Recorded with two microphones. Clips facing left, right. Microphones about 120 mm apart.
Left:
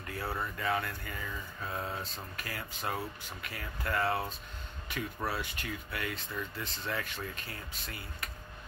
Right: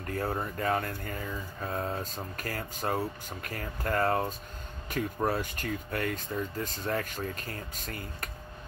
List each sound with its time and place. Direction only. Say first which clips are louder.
0.0 s speech: right 5 dB; 45° right (ahead or behind)